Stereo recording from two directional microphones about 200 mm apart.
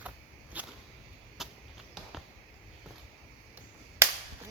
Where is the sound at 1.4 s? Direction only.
Centre (ahead or behind).